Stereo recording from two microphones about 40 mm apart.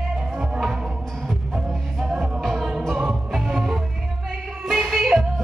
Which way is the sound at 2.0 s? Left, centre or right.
Centre.